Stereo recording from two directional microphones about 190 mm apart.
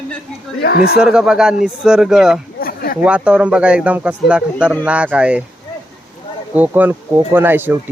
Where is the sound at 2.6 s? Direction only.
50° left (ahead or behind).